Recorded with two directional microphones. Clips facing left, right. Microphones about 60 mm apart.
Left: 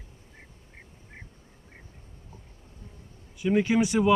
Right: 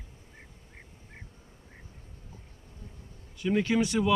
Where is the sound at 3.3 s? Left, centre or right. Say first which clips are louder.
Left 3 dB; centre.